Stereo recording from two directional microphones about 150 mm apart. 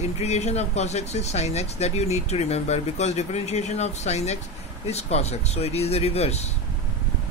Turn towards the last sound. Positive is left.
turn(degrees=45)  # may be behind; listen again after turning